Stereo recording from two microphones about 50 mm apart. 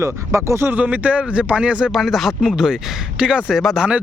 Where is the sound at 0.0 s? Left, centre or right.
Right.